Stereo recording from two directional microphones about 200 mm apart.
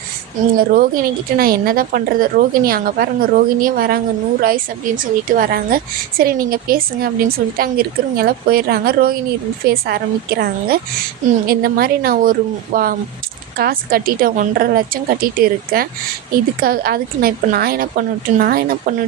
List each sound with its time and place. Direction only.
0.5 s a woman's voice: 45° right (ahead or behind)